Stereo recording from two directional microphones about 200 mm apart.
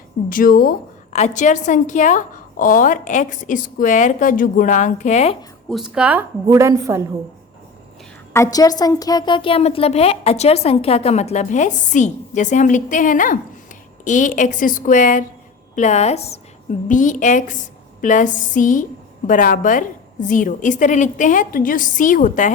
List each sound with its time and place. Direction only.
0.3 s a woman's voice: 45° left (ahead or behind)
5.6 s a woman's voice: centre (ahead or behind)
8.3 s a woman's voice: 15° left (ahead or behind); by 22.5 s 40° left (ahead or behind)